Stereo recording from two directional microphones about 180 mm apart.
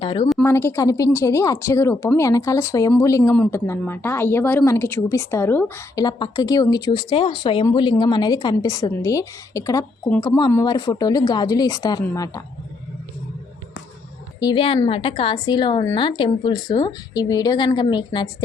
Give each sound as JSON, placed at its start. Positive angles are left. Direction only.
{"t": 0.0, "sound": "a woman's voice", "side_deg": 30}
{"t": 0.4, "sound": "a woman's voice", "side_deg": 15}
{"t": 14.3, "sound": "a woman's voice", "side_deg": 25}